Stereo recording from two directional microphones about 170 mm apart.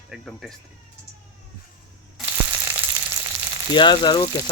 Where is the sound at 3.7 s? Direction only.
25° left (ahead or behind).